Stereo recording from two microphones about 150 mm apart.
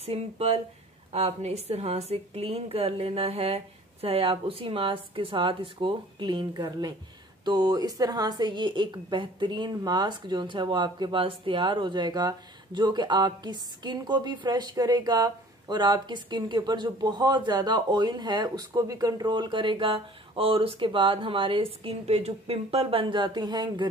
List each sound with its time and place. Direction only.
0.0 s a woman's voice: 40° right (ahead or behind)